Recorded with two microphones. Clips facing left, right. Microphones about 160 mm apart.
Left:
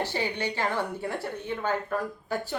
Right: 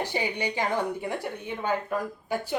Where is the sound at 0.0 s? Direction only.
15° right (ahead or behind).